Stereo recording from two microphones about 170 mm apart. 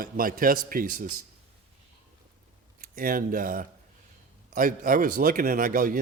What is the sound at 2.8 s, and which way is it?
Speech, 55° right (ahead or behind).